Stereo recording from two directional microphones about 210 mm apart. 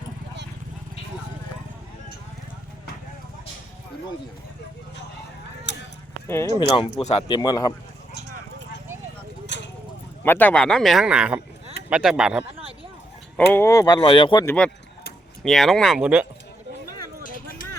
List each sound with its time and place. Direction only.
5.7 s a sound: 55° left (ahead or behind)
6.2 s speech: 10° left (ahead or behind)
6.7 s speech: 30° left (ahead or behind)
9.5 s clip-clop: 55° left (ahead or behind)
10.2 s speech: 10° left (ahead or behind)
13.5 s speech: 10° left (ahead or behind)
14.4 s speech: 5° left (ahead or behind)